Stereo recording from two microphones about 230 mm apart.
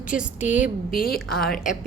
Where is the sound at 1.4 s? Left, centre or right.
Left.